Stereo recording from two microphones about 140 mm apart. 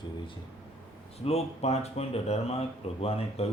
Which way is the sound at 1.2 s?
50° left (ahead or behind).